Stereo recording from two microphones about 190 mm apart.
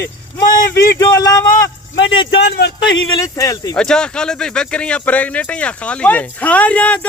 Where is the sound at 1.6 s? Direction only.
80° left.